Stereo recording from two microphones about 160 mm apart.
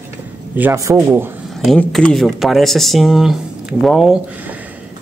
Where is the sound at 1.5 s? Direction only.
Centre (ahead or behind).